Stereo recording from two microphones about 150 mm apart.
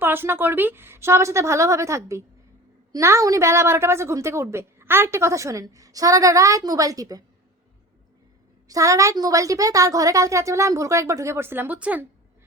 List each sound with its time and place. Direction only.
0.0 s a woman's voice: 15° right (ahead or behind)
8.6 s a woman's voice: 20° right (ahead or behind)